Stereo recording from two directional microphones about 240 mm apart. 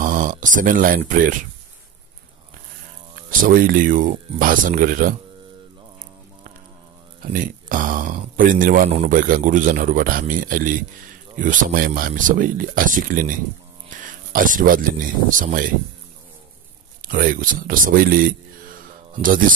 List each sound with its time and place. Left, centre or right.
0.0 s speech: right
3.2 s speech: right
7.2 s speech: right
17.0 s speech: right